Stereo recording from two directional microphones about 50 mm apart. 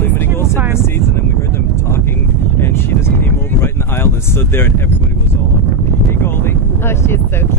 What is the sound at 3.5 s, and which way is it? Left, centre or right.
Speech, left.